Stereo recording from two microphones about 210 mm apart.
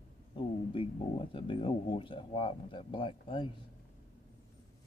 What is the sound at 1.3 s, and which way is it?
Speech, 25° left (ahead or behind).